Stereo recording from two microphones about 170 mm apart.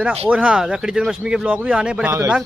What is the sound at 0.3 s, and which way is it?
Speech, 5° right (ahead or behind).